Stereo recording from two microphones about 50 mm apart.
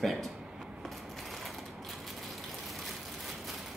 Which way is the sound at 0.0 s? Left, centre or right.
Centre.